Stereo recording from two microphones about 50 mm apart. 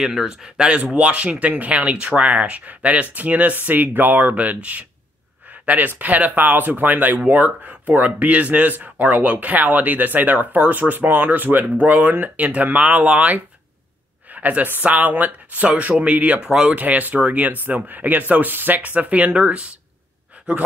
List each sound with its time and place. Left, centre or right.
0.0 s speech: centre; by 16.3 s right
16.3 s speech: centre
16.7 s speech: right